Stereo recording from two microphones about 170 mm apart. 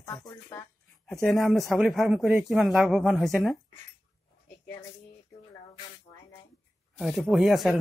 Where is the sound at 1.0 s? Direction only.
Centre (ahead or behind).